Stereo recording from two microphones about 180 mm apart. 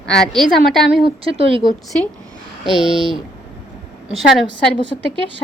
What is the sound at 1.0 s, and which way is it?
Speech, 30° right (ahead or behind).